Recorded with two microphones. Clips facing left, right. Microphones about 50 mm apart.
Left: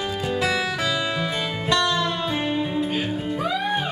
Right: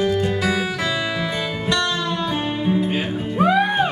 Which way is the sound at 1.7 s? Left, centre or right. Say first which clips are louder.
Left 1 dB; centre.